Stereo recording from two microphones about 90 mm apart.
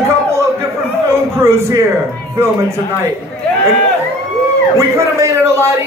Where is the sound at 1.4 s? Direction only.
30° right (ahead or behind).